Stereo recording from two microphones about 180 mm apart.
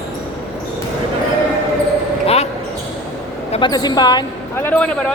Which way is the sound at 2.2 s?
35° left (ahead or behind).